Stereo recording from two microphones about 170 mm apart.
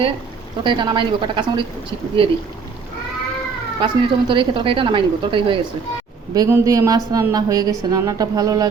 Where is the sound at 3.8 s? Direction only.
30° right (ahead or behind).